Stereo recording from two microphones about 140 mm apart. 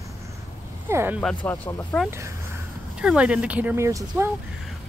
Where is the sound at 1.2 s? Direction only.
10° left (ahead or behind).